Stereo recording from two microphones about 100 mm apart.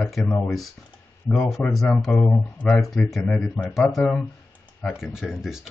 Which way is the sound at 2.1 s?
15° left (ahead or behind).